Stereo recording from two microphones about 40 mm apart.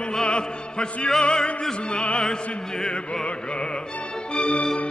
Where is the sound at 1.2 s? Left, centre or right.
Left.